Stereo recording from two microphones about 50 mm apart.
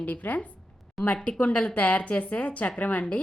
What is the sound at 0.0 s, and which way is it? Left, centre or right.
A woman's voice, left.